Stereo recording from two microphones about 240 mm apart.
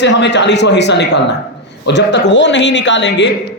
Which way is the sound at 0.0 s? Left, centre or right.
Left.